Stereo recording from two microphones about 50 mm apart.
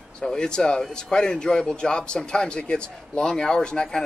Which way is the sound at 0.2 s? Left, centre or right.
Centre.